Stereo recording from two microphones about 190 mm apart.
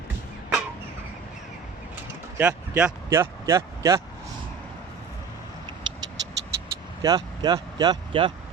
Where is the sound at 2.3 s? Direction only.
5° right (ahead or behind).